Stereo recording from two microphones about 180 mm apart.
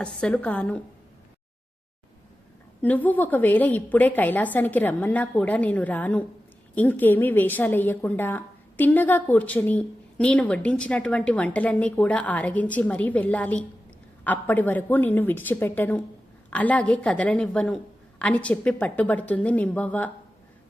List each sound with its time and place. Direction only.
0.0 s a woman's voice: 5° left (ahead or behind)
2.8 s a woman's voice: 10° left (ahead or behind)